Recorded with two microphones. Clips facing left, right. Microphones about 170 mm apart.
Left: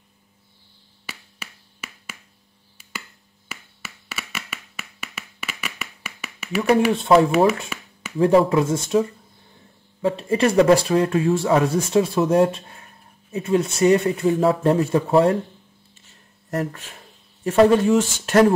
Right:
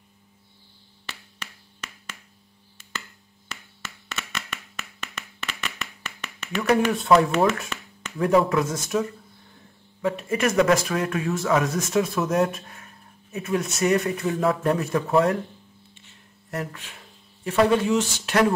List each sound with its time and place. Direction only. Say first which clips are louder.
1.0 s finger snapping: left 1 dB; 10° left (ahead or behind)
3.4 s a sound: left 1 dB; 10° left (ahead or behind)
6.9 s speech: left 3 dB; 25° left (ahead or behind)
7.2 s speech: left 4 dB; 10° left (ahead or behind)
8.2 s speech: left 4 dB; 30° left (ahead or behind)
10.0 s speech: left 4 dB; 30° left (ahead or behind)
15.9 s a sound: right 1 dB; 40° left (ahead or behind)